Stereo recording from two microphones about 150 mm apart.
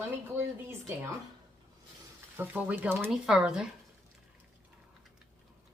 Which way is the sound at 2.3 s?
10° right (ahead or behind).